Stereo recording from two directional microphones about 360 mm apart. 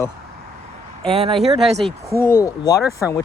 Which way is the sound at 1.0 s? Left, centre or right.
Centre.